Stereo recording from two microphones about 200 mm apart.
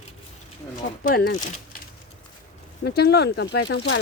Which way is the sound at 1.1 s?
50° left (ahead or behind).